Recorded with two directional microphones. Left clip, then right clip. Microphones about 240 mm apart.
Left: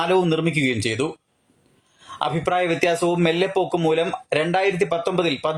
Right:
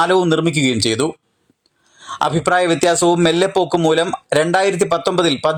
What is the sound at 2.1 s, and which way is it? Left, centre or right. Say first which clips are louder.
Speech: right 6 dB; right.